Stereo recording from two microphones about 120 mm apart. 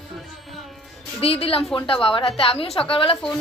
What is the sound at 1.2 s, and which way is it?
A woman's voice, 55° left (ahead or behind).